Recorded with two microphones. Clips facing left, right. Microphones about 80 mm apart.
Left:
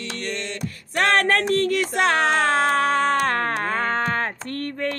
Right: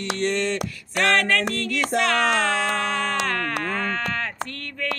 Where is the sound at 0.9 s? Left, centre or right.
Left.